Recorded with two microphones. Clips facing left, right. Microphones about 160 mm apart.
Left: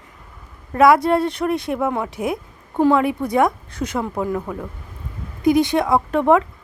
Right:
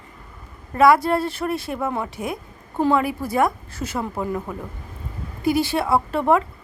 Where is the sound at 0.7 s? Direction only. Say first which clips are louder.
Left 2 dB; centre (ahead or behind).